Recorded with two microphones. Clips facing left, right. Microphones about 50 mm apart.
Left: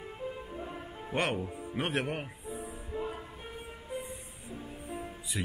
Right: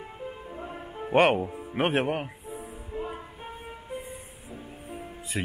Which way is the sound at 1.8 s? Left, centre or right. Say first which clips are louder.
Right 7 dB; right.